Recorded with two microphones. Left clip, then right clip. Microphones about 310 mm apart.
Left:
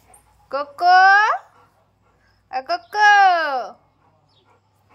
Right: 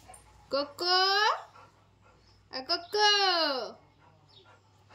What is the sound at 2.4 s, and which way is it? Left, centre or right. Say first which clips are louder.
A woman's voice: left 10 dB; centre.